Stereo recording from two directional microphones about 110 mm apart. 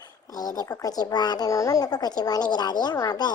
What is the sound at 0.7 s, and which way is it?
Speech, 30° left (ahead or behind).